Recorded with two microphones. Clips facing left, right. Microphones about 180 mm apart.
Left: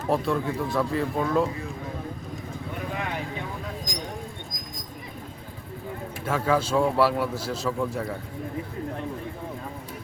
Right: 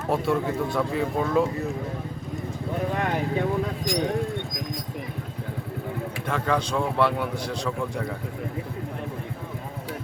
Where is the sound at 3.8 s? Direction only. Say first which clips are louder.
Right 10 dB; 70° right (ahead or behind).